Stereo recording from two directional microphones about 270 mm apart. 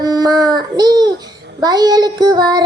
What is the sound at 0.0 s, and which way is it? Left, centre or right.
Child singing, centre.